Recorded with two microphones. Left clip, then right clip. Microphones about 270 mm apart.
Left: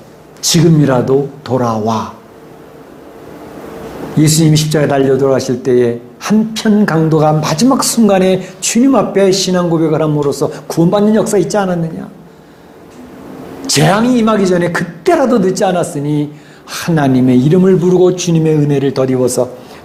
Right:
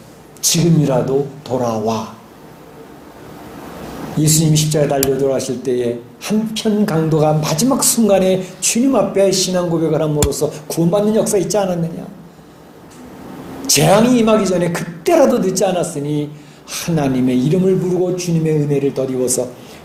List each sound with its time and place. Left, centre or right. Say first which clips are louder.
0.4 s a woman's voice: left 5 dB; left
4.2 s speech: left 5 dB; left
13.6 s a woman's voice: even; left